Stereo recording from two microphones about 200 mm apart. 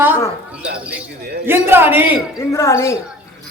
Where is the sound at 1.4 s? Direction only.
10° right (ahead or behind).